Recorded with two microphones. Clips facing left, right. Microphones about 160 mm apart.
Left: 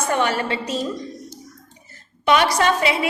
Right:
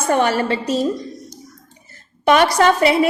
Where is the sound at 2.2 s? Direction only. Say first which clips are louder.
Right 4 dB; 45° right (ahead or behind).